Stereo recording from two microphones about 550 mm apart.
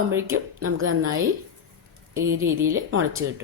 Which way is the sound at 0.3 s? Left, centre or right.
Right.